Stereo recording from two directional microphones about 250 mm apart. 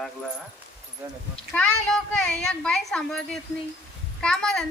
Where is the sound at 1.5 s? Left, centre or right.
Centre.